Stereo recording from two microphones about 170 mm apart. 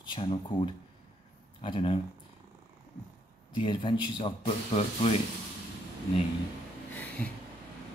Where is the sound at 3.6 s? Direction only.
30° left (ahead or behind).